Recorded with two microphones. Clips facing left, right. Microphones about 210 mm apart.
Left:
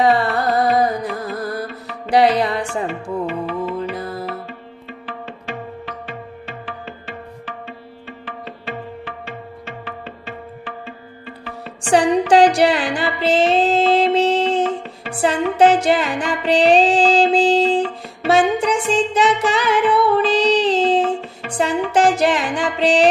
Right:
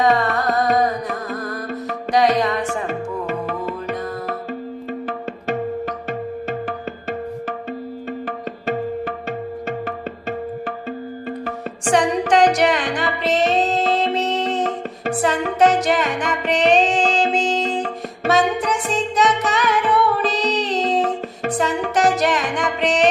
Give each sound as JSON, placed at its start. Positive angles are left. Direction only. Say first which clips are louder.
{"t": 0.0, "sound": "music", "louder": "left 1 dB", "side_deg": 30}
{"t": 2.8, "sound": "music", "louder": "left 1 dB", "side_deg": -45}
{"t": 4.9, "sound": "music", "louder": "right 4 dB", "side_deg": -45}
{"t": 12.3, "sound": "music", "louder": "left 2 dB", "side_deg": 30}